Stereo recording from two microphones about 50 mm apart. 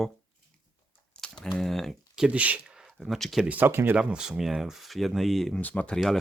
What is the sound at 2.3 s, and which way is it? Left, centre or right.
Speech, right.